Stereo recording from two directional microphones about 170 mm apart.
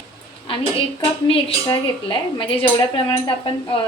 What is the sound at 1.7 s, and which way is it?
Speech, 30° left (ahead or behind).